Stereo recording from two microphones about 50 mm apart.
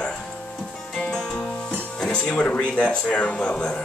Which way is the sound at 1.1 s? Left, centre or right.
Centre.